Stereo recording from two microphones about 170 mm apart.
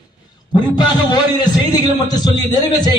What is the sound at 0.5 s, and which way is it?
A man's voice, 25° left (ahead or behind).